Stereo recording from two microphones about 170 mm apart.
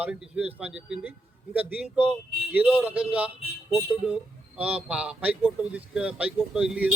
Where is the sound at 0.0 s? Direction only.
5° right (ahead or behind).